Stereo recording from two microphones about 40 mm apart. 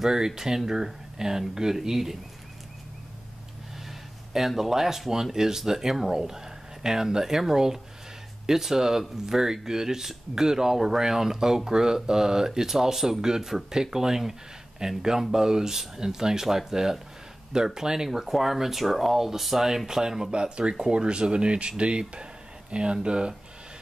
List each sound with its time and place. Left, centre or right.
0.0 s speech: centre
4.3 s speech: centre; by 23.3 s right